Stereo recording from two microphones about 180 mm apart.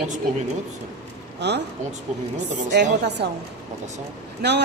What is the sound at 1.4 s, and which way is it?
Speech, 70° right (ahead or behind).